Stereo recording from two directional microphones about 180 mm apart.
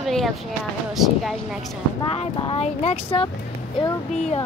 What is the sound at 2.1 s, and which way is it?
Speech, 30° left (ahead or behind).